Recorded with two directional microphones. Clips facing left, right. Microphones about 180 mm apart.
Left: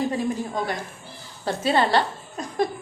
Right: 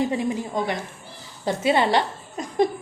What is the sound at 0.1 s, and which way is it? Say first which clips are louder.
A woman's voice: right 1 dB; 20° right (ahead or behind).